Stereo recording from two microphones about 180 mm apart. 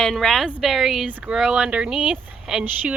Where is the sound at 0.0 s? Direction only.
Centre (ahead or behind).